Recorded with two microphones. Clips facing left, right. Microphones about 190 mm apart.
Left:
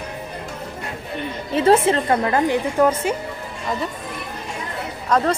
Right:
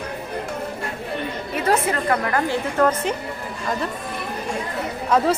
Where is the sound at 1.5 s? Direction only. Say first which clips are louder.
Left 6 dB; 25° left (ahead or behind); by 3.1 s 10° left (ahead or behind).